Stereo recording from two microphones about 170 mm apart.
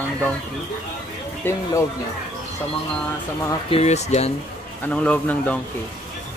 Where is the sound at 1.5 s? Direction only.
15° left (ahead or behind).